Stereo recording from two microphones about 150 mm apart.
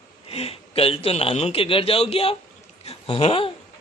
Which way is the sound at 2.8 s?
40° left (ahead or behind).